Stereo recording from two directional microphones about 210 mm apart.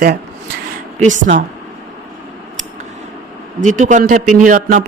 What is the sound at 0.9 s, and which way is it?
Speech, 35° right (ahead or behind).